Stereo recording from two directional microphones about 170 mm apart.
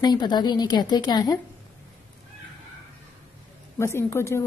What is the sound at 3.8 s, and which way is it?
Speech, 15° left (ahead or behind).